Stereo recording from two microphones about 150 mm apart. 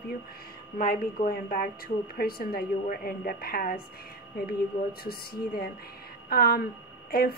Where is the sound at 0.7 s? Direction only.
70° left (ahead or behind).